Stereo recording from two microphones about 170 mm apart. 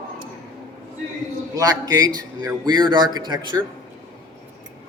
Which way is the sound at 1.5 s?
20° right (ahead or behind).